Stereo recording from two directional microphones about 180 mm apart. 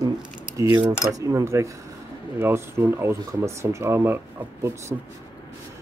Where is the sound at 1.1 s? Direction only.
20° right (ahead or behind).